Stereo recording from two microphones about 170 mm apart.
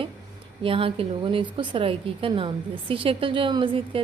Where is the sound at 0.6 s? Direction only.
30° right (ahead or behind).